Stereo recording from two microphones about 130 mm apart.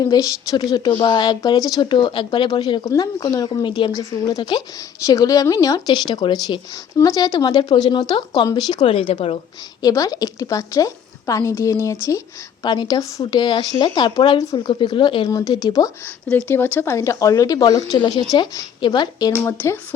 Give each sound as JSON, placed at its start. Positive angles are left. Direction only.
{"t": 0.0, "sound": "a woman's voice", "side_deg": 30}
{"t": 9.8, "sound": "a woman's voice", "side_deg": 25}
{"t": 12.6, "sound": "speech", "side_deg": 35}
{"t": 15.3, "sound": "a woman's voice", "side_deg": 30}
{"t": 16.5, "sound": "a woman's voice", "side_deg": 15}